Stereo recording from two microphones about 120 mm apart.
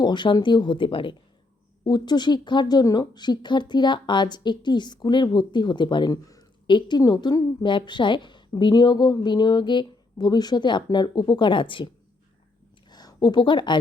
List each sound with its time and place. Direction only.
0.0 s a woman's voice: 40° left (ahead or behind)
12.9 s speech: 35° left (ahead or behind)